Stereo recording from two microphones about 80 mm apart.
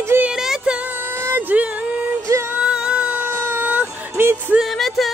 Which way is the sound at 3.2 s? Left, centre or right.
Right.